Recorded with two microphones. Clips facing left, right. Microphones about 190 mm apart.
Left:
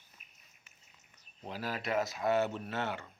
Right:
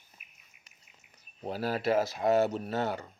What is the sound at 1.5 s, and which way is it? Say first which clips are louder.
Speech: right 7 dB; 35° right (ahead or behind).